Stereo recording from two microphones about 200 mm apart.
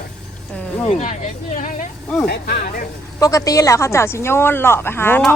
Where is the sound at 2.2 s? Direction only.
50° left (ahead or behind).